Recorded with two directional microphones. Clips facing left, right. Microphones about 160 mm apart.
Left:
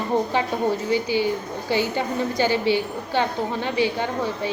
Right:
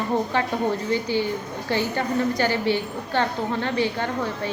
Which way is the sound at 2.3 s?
15° left (ahead or behind).